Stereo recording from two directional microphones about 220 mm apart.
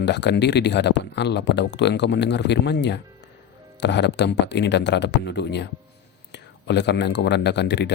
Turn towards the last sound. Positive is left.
turn(degrees=50)  # may be behind; listen again after turning